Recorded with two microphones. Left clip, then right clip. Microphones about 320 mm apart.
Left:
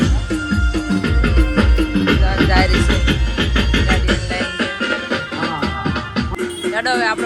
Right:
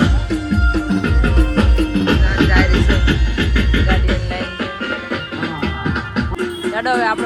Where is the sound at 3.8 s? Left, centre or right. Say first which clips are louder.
Left 1 dB; left.